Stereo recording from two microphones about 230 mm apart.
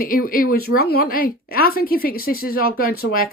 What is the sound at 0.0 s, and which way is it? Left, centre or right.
Speech, left.